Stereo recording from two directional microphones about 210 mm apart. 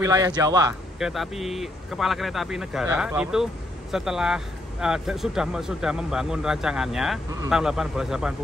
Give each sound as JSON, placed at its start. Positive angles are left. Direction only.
{"t": 0.0, "sound": "speech", "side_deg": -15}
{"t": 0.9, "sound": "speech", "side_deg": 0}